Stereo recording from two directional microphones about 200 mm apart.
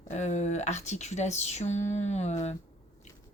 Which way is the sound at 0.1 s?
35° left (ahead or behind).